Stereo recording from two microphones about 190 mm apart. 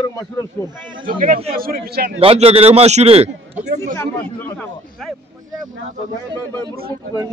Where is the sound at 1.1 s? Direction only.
45° right (ahead or behind).